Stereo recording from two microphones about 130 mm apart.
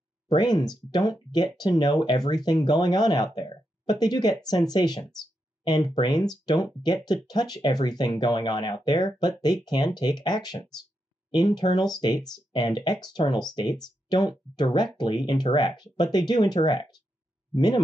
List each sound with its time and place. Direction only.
0.3 s speech: 35° left (ahead or behind)